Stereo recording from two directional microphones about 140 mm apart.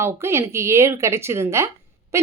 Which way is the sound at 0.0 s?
20° right (ahead or behind).